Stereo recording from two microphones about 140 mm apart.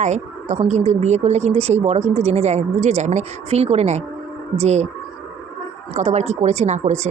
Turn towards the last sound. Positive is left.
turn(degrees=-55)  # may be behind; listen again after turning